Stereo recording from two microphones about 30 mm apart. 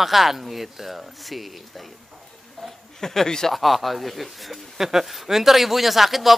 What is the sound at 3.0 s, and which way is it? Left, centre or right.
Speech, centre.